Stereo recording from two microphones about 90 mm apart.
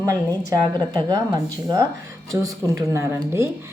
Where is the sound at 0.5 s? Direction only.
45° right (ahead or behind).